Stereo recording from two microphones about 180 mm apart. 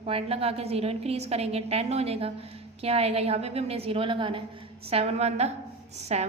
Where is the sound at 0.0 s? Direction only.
35° right (ahead or behind).